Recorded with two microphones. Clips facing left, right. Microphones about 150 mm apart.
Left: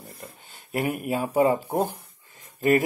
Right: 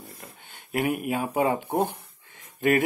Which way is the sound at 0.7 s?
5° right (ahead or behind).